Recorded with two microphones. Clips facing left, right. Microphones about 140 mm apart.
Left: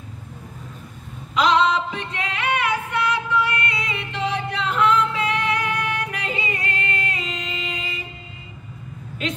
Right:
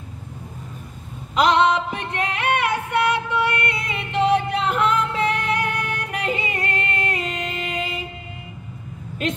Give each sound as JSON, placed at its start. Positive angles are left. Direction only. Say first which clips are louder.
{"t": 1.3, "sound": "music", "louder": "right 1 dB", "side_deg": -50}